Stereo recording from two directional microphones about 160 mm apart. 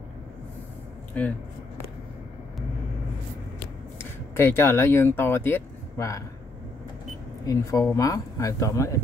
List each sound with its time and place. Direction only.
1.1 s speech: 10° left (ahead or behind)
4.0 s speech: 15° left (ahead or behind)
7.4 s speech: 20° left (ahead or behind)